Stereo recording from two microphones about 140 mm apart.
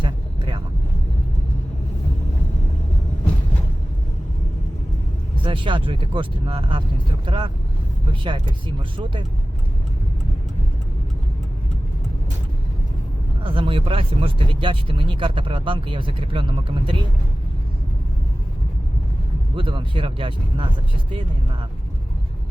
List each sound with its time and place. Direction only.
0.0 s vehicle: 35° right (ahead or behind)
5.4 s speech: 35° right (ahead or behind)
13.4 s speech: 40° right (ahead or behind)
19.5 s speech: 40° right (ahead or behind)